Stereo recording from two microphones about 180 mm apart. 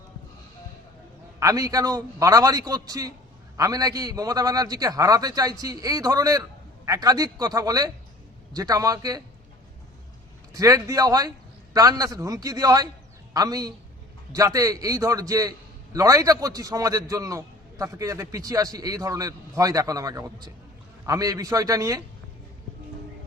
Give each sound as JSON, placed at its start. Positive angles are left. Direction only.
{"t": 1.4, "sound": "a man's voice", "side_deg": -20}
{"t": 10.5, "sound": "a man's voice", "side_deg": -20}